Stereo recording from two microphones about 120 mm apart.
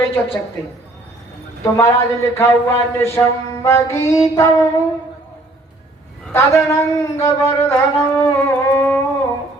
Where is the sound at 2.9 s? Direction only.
20° left (ahead or behind).